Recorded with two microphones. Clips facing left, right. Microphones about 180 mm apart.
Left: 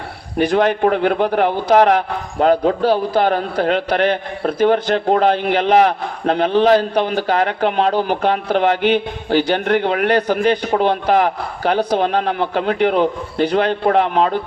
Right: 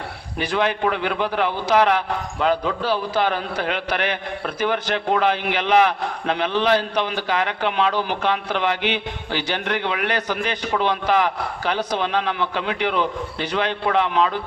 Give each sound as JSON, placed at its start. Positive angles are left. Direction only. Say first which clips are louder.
{"t": 0.3, "sound": "a man's voice", "louder": "left 7 dB", "side_deg": 50}